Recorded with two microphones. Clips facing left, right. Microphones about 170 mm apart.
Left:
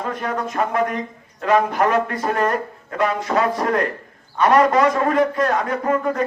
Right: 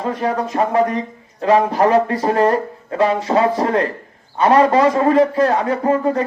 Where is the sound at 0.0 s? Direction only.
30° right (ahead or behind).